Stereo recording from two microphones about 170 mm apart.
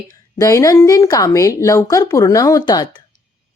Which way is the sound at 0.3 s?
20° left (ahead or behind).